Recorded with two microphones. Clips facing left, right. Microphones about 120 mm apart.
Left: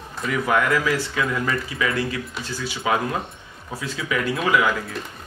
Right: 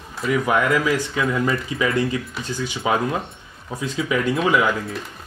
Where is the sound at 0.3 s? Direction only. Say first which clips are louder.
Right 2 dB; 15° right (ahead or behind).